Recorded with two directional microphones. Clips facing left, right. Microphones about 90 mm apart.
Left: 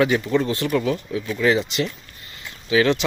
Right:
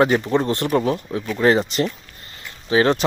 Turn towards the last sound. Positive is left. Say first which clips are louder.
# right 2 dB
turn(degrees=-40)  # may be behind; listen again after turning